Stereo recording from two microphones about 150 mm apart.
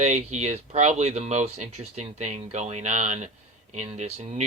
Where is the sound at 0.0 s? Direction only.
50° right (ahead or behind).